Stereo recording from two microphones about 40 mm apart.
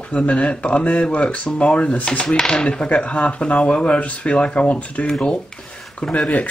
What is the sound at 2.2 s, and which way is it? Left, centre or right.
Speech, centre.